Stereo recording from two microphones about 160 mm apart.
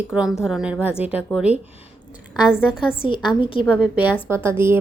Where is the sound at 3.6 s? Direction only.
5° right (ahead or behind).